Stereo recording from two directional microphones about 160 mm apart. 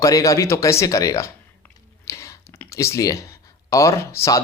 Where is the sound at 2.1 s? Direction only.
20° left (ahead or behind).